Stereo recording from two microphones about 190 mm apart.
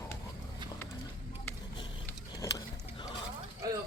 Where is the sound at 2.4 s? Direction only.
15° left (ahead or behind).